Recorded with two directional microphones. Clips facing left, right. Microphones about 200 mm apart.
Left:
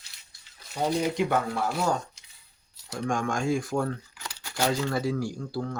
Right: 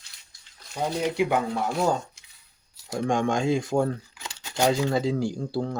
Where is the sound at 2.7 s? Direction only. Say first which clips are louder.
Right 4 dB; 15° right (ahead or behind).